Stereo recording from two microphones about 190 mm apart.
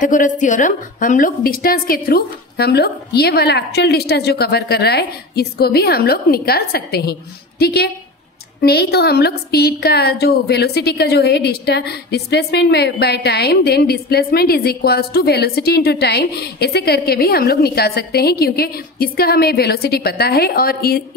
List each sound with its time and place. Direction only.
0.0 s a woman's voice: 45° left (ahead or behind)